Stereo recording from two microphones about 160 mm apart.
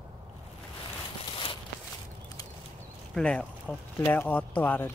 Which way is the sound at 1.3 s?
35° left (ahead or behind).